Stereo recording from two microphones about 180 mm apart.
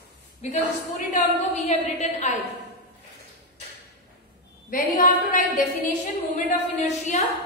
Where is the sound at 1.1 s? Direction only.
40° left (ahead or behind).